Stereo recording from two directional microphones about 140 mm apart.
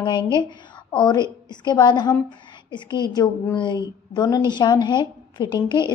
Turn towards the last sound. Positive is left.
turn(degrees=30)  # may be behind; listen again after turning